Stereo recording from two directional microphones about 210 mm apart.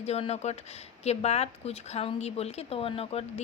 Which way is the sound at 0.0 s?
30° left (ahead or behind).